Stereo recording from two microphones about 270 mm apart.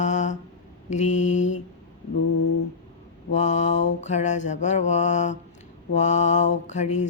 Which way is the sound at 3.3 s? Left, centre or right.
Left.